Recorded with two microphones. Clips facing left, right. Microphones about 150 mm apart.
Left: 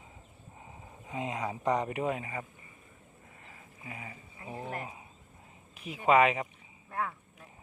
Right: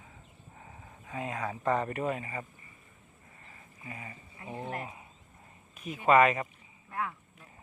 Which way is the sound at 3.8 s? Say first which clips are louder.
Even; 10° left (ahead or behind).